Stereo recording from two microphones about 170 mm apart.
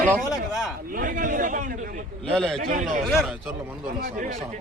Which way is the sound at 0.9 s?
50° right (ahead or behind).